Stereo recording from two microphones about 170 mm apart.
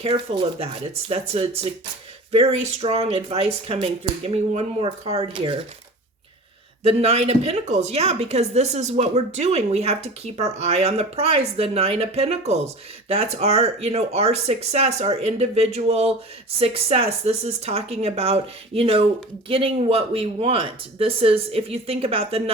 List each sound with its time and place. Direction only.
0.0 s a woman's voice: 35° right (ahead or behind)
6.8 s a woman's voice: 35° right (ahead or behind)